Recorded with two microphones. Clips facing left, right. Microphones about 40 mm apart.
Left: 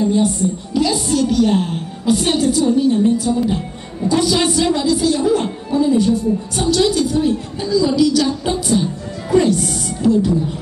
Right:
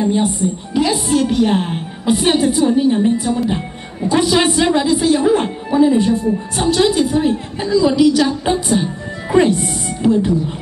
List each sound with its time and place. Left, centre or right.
0.0 s a woman's voice: right